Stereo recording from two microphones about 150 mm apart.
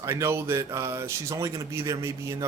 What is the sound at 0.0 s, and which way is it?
Speech, 20° right (ahead or behind).